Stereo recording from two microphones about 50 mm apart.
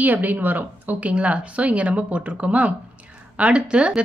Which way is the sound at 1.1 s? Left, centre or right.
Right.